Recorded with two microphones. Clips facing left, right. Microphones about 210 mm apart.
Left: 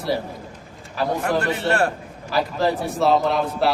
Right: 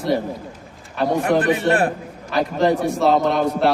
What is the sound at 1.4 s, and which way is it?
Speech, 15° right (ahead or behind).